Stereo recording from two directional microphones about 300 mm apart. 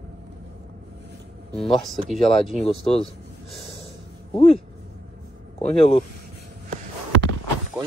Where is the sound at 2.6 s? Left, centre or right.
Centre.